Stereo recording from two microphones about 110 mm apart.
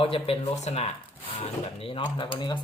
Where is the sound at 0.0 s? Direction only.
60° left (ahead or behind); by 0.9 s 80° left.